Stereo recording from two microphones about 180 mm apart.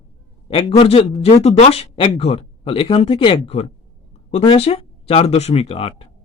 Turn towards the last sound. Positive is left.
turn(degrees=30)  # may be behind; listen again after turning